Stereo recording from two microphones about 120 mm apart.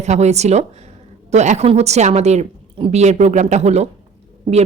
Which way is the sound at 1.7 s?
65° right (ahead or behind).